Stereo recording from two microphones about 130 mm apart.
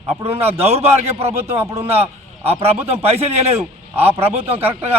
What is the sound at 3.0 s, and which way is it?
Speech, 50° right (ahead or behind).